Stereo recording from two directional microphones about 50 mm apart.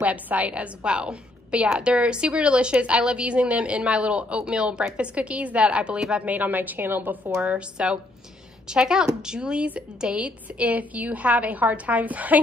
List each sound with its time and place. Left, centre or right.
0.0 s a woman's voice: right
7.4 s a woman's voice: right